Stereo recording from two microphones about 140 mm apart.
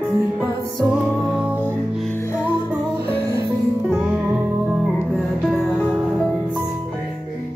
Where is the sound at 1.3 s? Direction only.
10° right (ahead or behind).